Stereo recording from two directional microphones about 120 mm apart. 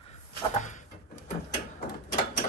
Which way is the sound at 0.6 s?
90° left.